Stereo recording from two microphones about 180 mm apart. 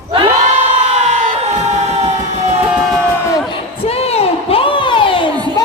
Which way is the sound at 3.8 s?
35° left (ahead or behind).